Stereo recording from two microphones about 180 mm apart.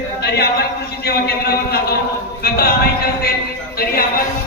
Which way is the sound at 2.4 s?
60° left (ahead or behind).